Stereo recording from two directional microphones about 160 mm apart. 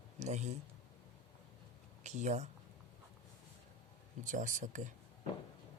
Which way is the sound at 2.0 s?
45° right (ahead or behind).